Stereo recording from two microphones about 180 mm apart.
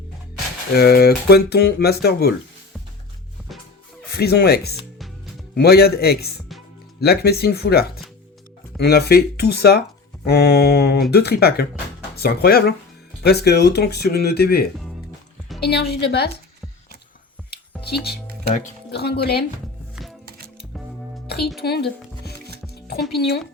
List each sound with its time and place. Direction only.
0.8 s speech: 60° left (ahead or behind)
4.2 s speech: 60° left (ahead or behind)
4.9 s music: centre (ahead or behind)
5.5 s speech: 60° left (ahead or behind)
17.5 s music: 60° left (ahead or behind)
18.9 s speech: 65° left (ahead or behind)
20.0 s music: 5° right (ahead or behind)
21.2 s music: 60° left (ahead or behind)